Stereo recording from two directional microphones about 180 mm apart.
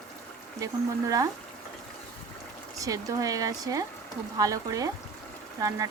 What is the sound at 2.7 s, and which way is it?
Speech, 20° right (ahead or behind).